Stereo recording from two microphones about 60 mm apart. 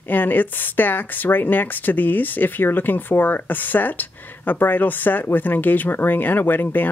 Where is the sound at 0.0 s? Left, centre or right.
Left.